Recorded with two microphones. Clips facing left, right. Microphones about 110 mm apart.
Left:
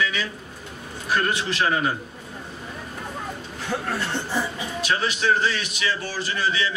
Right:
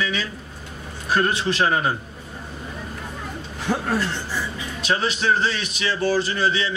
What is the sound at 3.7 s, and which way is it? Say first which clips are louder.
Speech: right 4 dB; 45° right (ahead or behind).